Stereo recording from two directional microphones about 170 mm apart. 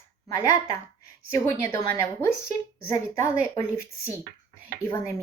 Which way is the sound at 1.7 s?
15° left (ahead or behind).